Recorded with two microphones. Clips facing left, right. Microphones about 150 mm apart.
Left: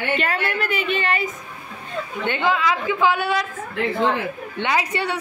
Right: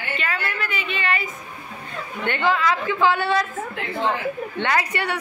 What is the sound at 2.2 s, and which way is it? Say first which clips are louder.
A woman's voice: even; 15° left (ahead or behind).